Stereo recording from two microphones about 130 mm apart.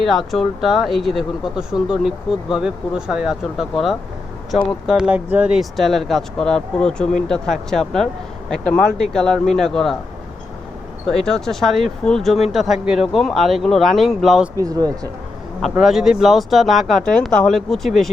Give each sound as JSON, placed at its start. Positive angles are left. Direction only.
{"t": 0.0, "sound": "speech", "side_deg": 0}
{"t": 11.0, "sound": "speech", "side_deg": 5}
{"t": 14.5, "sound": "a man's voice", "side_deg": -30}
{"t": 15.8, "sound": "speech", "side_deg": -5}